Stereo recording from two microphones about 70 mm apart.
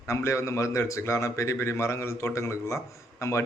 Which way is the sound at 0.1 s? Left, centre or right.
Left.